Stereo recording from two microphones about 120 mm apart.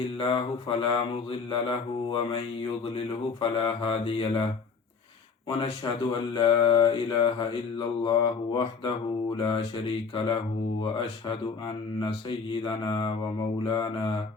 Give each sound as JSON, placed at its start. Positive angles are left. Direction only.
{"t": 0.2, "sound": "mantra", "side_deg": 45}
{"t": 3.4, "sound": "mantra", "side_deg": 45}
{"t": 5.5, "sound": "speech", "side_deg": 40}
{"t": 11.3, "sound": "mantra", "side_deg": 40}
{"t": 13.7, "sound": "speech", "side_deg": 40}